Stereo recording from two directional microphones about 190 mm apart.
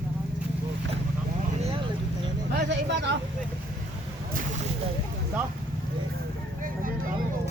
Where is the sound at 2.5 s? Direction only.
65° right (ahead or behind).